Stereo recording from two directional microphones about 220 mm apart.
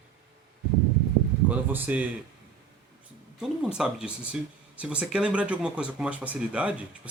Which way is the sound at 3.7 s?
5° right (ahead or behind).